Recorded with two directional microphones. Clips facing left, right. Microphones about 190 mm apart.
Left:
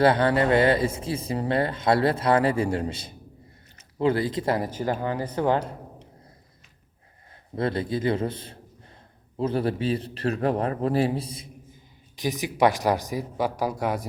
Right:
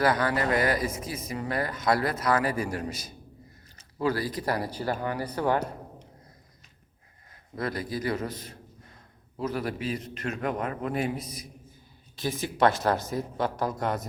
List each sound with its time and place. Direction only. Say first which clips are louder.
0.0 s speech: left 5 dB; 30° left (ahead or behind)
7.5 s a man's voice: left 5 dB; 25° left (ahead or behind)
12.1 s speech: left 3 dB; 15° left (ahead or behind)